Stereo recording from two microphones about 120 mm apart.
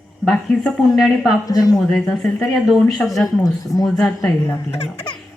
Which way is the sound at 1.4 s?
30° left (ahead or behind).